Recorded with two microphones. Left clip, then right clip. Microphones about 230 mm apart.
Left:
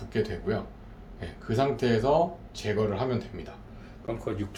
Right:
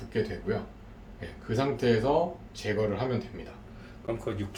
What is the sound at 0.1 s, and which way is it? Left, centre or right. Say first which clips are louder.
Speech: left 1 dB; left.